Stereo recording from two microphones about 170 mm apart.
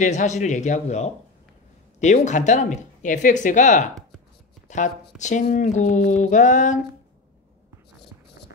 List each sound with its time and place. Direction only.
0.0 s speech: 45° left (ahead or behind)